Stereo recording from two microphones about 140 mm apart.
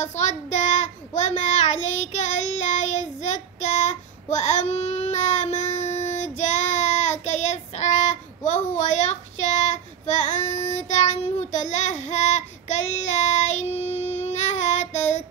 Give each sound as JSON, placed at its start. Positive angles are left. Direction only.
{"t": 0.0, "sound": "child singing", "side_deg": 55}